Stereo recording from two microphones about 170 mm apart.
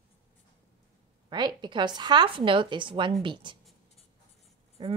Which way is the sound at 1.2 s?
25° right (ahead or behind).